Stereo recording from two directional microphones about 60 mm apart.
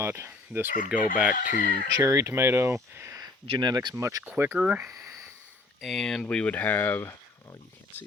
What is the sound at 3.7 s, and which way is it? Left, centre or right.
Speech, right.